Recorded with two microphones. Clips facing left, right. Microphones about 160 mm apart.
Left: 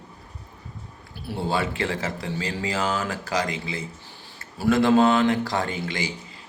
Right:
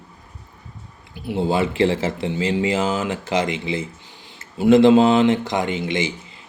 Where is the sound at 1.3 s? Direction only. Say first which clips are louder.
Right 6 dB; 20° right (ahead or behind).